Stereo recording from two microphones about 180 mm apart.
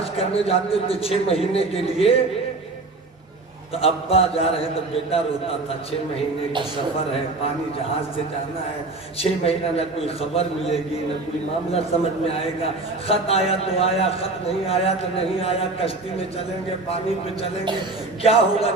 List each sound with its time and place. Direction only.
0.2 s a man's voice: 35° left (ahead or behind)
3.8 s a man's voice: 35° left (ahead or behind)
9.1 s a man's voice: 35° left (ahead or behind)
18.2 s a man's voice: 35° left (ahead or behind)